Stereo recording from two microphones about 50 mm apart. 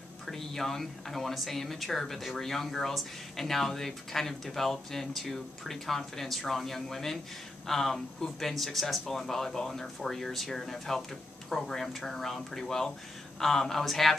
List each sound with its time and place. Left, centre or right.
0.3 s speech: centre